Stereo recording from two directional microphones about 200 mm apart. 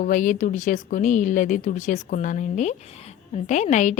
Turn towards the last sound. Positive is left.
turn(degrees=35)  # may be behind; listen again after turning